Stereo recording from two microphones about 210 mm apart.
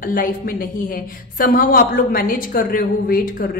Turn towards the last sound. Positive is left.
turn(degrees=40)  # may be behind; listen again after turning